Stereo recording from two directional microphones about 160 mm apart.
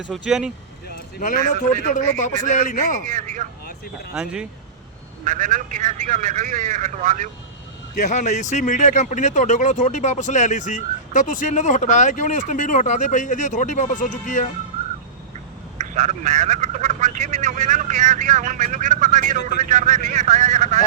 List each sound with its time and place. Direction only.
0.1 s speech: 5° right (ahead or behind)
1.2 s a man's voice: 55° left (ahead or behind)
3.1 s a man's voice: 50° right (ahead or behind)
4.1 s speech: 5° right (ahead or behind)
5.2 s a man's voice: 50° right (ahead or behind)
7.9 s speech: 50° left (ahead or behind)
15.8 s a man's voice: 50° right (ahead or behind)